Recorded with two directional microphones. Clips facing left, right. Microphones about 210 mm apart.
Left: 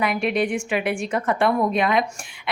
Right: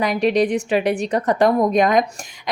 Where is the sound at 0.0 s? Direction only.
35° right (ahead or behind).